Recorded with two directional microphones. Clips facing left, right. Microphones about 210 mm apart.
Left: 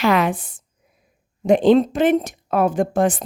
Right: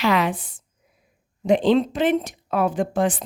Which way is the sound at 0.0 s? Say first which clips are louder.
Left 3 dB; 50° left (ahead or behind).